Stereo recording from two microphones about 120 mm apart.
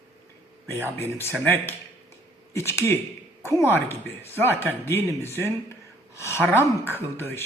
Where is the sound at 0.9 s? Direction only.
20° left (ahead or behind).